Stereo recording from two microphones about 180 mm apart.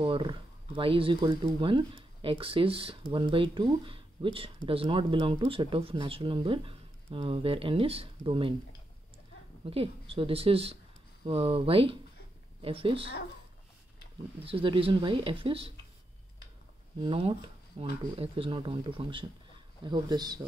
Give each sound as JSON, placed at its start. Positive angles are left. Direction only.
{"t": 0.0, "sound": "speech", "side_deg": -30}
{"t": 9.7, "sound": "speech", "side_deg": -30}
{"t": 14.4, "sound": "speech", "side_deg": -30}
{"t": 17.0, "sound": "speech", "side_deg": -30}